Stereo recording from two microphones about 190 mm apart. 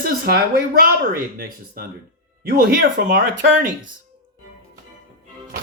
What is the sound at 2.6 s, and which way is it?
Speech, 50° right (ahead or behind).